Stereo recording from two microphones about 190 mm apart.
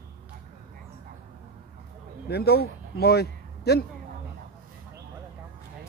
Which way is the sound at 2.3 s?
55° left (ahead or behind).